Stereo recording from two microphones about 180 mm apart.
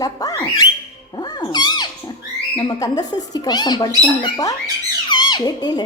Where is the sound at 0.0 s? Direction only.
20° left (ahead or behind).